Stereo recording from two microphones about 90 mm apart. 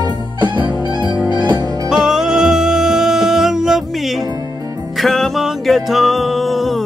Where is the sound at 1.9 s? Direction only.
5° right (ahead or behind).